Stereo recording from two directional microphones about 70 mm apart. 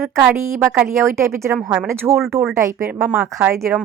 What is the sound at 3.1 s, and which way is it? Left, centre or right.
Speech, centre.